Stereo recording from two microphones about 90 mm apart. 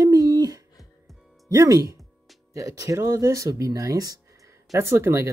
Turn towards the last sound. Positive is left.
turn(degrees=-30)  # may be behind; listen again after turning